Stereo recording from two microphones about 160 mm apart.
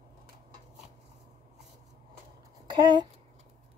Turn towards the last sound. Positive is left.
turn(degrees=-30)  # may be behind; listen again after turning